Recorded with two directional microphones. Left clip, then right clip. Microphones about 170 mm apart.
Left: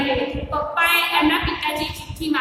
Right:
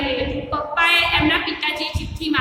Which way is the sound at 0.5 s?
5° left (ahead or behind).